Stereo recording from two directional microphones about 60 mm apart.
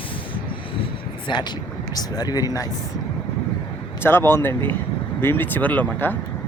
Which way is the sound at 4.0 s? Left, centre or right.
Left.